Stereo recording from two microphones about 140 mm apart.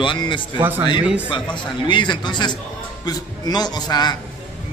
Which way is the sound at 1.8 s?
35° left (ahead or behind).